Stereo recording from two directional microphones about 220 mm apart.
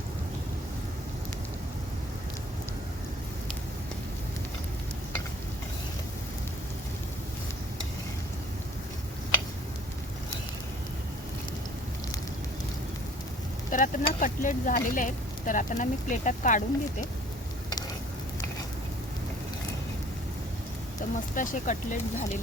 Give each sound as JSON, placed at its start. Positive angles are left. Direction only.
{"t": 13.7, "sound": "speech", "side_deg": 35}
{"t": 21.3, "sound": "speech", "side_deg": 35}